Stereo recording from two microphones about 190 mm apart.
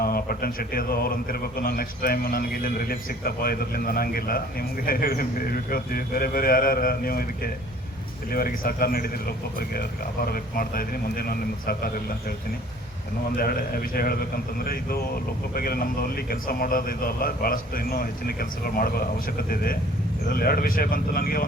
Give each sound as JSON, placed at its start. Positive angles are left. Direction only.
{"t": 0.0, "sound": "speech", "side_deg": 50}
{"t": 13.3, "sound": "speech", "side_deg": 50}